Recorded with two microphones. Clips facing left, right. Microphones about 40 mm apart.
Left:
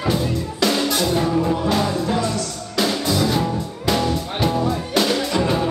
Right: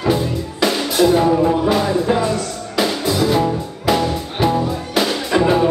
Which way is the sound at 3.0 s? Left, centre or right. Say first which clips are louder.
Right 4 dB; centre.